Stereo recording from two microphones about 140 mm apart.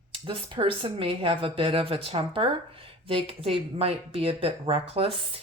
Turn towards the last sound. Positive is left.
turn(degrees=-45)  # may be behind; listen again after turning